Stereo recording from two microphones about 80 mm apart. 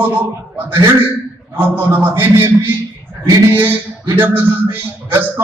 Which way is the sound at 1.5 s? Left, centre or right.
Right.